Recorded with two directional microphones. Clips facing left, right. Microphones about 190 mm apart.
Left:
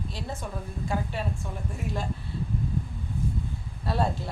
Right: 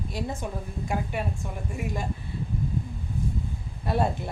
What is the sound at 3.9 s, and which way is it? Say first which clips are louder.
Speech: right 2 dB; 20° right (ahead or behind).